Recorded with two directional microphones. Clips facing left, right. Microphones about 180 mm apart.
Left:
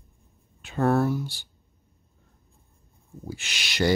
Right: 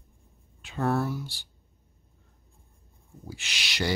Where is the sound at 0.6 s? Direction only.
50° left (ahead or behind).